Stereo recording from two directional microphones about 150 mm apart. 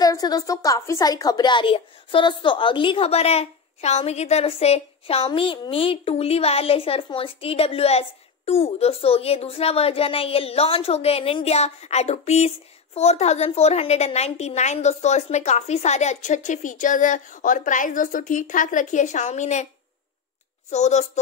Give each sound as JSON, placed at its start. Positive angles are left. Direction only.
{"t": 0.0, "sound": "a woman's voice", "side_deg": 25}
{"t": 20.7, "sound": "a woman's voice", "side_deg": 50}